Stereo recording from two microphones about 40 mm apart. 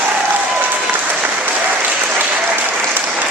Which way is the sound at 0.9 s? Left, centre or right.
Right.